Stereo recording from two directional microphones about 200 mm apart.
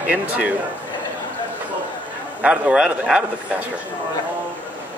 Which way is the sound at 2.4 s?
5° right (ahead or behind).